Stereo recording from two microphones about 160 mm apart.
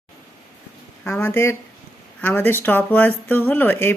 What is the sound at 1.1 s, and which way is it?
Speech, 15° left (ahead or behind).